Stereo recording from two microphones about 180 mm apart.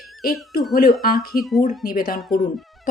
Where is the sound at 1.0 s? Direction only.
55° left (ahead or behind).